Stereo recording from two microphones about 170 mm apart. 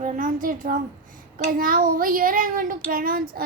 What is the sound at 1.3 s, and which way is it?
Child singing, 55° right (ahead or behind).